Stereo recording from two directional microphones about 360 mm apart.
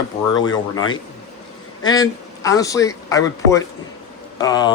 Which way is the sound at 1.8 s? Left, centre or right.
Centre.